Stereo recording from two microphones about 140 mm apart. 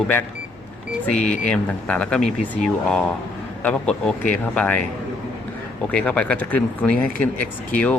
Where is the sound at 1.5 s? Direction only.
10° left (ahead or behind).